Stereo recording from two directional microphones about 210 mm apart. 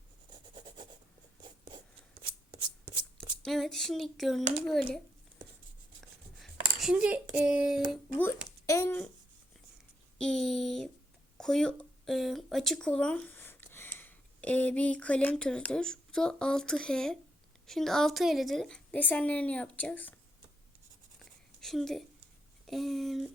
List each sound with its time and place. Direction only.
1.4 s writing: 20° right (ahead or behind)
3.4 s a woman's voice: centre (ahead or behind)
6.4 s a sound: centre (ahead or behind)
7.3 s a woman's voice: 5° right (ahead or behind)
8.6 s speech: 15° left (ahead or behind)
10.2 s a woman's voice: 5° left (ahead or behind)
21.2 s a sound: centre (ahead or behind)
22.6 s a woman's voice: centre (ahead or behind)